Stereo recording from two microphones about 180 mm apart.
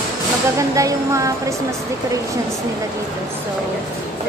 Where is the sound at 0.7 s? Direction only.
20° right (ahead or behind).